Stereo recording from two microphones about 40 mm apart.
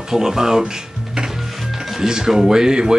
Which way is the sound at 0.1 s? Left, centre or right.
Centre.